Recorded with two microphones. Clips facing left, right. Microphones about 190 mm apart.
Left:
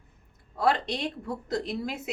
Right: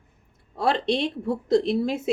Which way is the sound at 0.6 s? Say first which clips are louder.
Right 4 dB; 25° right (ahead or behind).